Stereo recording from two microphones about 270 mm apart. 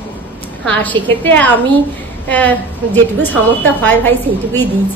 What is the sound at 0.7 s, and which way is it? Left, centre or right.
A woman's voice, centre.